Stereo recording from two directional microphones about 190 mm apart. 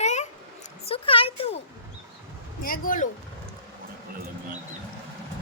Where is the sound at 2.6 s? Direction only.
50° left (ahead or behind).